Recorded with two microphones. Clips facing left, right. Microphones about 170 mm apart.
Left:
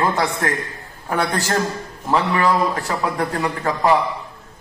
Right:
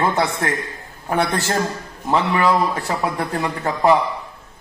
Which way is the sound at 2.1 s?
20° right (ahead or behind).